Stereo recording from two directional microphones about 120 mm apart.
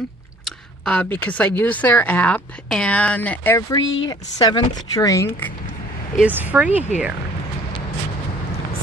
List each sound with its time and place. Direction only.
0.8 s a woman's voice: 10° left (ahead or behind)
3.5 s speech: 35° left (ahead or behind)
6.1 s speech: 10° right (ahead or behind)